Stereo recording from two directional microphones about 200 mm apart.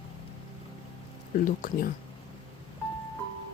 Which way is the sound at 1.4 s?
45° left (ahead or behind).